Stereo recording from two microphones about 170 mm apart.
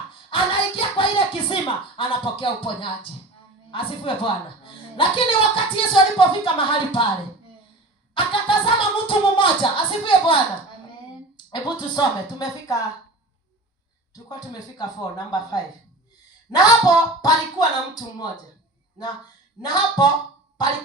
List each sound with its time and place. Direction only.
0.3 s a sound: 30° left (ahead or behind)
2.0 s a woman's voice: 30° left (ahead or behind)
8.1 s music: 30° left (ahead or behind)
11.5 s music: 25° left (ahead or behind)
14.1 s music: 20° left (ahead or behind)
19.6 s music: 25° left (ahead or behind)